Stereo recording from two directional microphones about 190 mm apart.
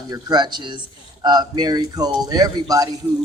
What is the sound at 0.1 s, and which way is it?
Speech, 20° right (ahead or behind).